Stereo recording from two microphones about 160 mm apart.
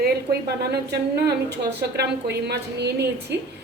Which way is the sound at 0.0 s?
85° right.